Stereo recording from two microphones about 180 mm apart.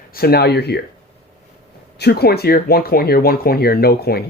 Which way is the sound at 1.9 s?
65° left (ahead or behind).